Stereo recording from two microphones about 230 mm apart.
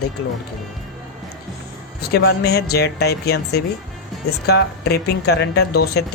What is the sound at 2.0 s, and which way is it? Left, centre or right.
Speech, left.